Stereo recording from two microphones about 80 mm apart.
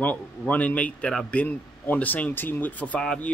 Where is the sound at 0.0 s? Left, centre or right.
Centre.